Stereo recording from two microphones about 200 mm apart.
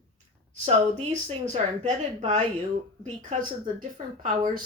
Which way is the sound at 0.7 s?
30° right (ahead or behind).